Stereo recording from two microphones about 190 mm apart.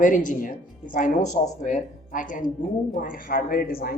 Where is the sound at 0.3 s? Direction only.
45° left (ahead or behind).